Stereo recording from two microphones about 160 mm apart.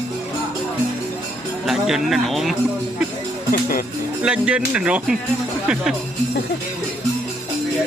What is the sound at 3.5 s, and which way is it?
Speech, 65° left (ahead or behind).